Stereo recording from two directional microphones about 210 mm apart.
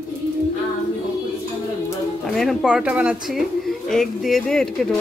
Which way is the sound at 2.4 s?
Centre (ahead or behind).